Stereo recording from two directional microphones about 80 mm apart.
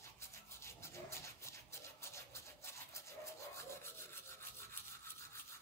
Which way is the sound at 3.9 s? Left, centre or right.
Left.